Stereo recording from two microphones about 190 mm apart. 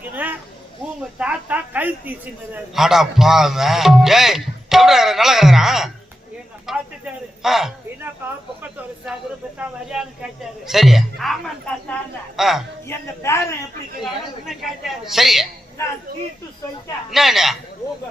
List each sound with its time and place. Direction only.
0.0 s a sound: 10° right (ahead or behind)
1.2 s a woman's voice: 5° right (ahead or behind)
6.7 s a sound: centre (ahead or behind)
9.6 s speech: 5° right (ahead or behind)
12.4 s speech: centre (ahead or behind)
12.9 s a man's voice: 15° left (ahead or behind)
14.4 s speech: centre (ahead or behind)
15.8 s a man's voice: 15° left (ahead or behind)
17.1 s speech: centre (ahead or behind)